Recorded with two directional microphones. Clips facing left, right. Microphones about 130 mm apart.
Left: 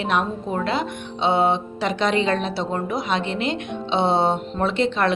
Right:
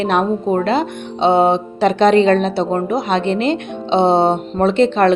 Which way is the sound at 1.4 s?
25° right (ahead or behind).